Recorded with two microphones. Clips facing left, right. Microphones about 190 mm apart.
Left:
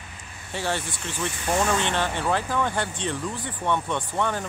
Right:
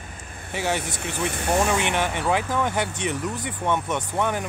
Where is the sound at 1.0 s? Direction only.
60° right (ahead or behind).